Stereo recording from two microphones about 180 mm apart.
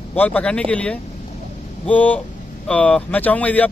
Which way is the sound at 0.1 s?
10° left (ahead or behind).